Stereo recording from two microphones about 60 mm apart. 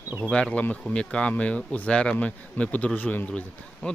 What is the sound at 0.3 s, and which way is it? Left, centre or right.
Speech, centre.